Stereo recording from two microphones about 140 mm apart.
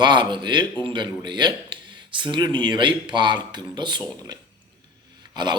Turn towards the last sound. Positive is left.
turn(degrees=-30)  # may be behind; listen again after turning